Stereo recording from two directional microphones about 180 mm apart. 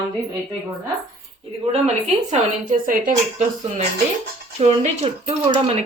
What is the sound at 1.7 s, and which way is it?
Speech, 40° right (ahead or behind).